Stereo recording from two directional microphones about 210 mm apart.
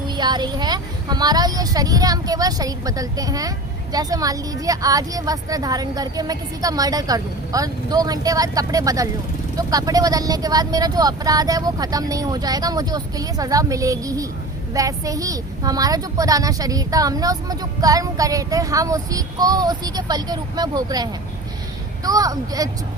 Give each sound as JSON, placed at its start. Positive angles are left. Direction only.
{"t": 0.1, "sound": "a woman's voice", "side_deg": -20}